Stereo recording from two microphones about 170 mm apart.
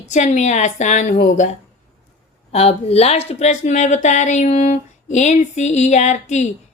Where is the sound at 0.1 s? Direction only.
45° left (ahead or behind).